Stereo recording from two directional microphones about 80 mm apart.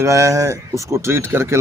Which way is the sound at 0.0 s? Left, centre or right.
Right.